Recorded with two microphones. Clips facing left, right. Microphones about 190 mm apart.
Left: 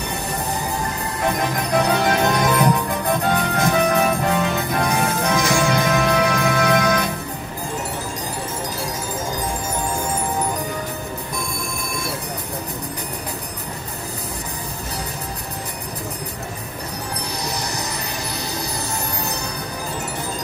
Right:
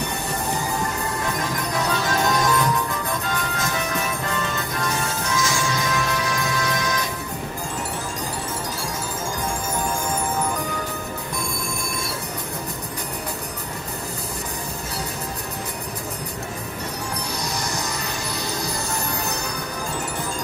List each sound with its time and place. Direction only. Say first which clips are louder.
1.8 s music: left 5 dB; 60° left (ahead or behind)